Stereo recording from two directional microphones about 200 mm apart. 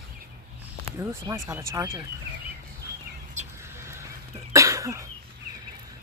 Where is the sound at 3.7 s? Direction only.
15° right (ahead or behind).